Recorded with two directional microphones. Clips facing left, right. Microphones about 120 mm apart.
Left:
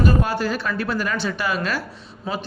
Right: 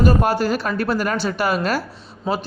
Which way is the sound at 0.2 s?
40° right (ahead or behind).